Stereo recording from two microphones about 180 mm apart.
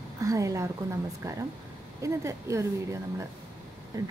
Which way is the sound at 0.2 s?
20° right (ahead or behind).